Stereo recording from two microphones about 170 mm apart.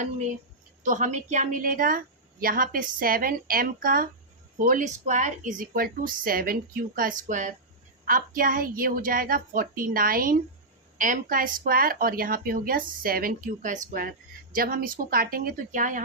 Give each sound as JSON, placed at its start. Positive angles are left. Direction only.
{"t": 0.8, "sound": "a woman's voice", "side_deg": -45}